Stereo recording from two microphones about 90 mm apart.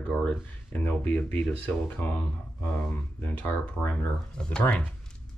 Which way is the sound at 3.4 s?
20° left (ahead or behind).